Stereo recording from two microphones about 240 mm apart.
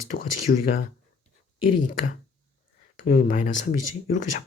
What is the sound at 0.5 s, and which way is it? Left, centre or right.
Speech, left.